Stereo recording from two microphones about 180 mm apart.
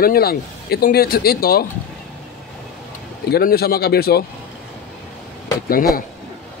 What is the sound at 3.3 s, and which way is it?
Speech, 60° left (ahead or behind).